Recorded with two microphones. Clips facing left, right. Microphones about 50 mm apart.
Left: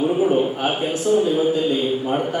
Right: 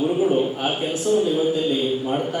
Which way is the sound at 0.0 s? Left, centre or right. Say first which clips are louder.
Left 1 dB; left.